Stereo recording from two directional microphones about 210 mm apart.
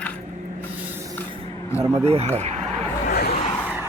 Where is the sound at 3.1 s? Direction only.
50° left (ahead or behind).